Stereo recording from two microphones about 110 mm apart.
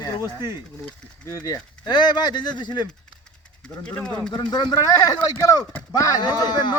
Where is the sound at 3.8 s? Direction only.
10° left (ahead or behind).